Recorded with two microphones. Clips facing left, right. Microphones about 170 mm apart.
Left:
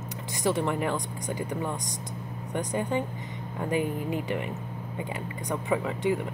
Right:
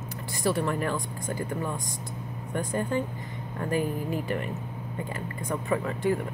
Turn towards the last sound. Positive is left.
turn(degrees=15)  # may be behind; listen again after turning